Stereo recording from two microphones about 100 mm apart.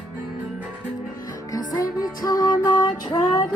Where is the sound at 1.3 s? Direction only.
35° left (ahead or behind).